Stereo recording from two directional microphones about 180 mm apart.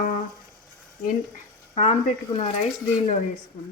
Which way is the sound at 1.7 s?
35° left (ahead or behind).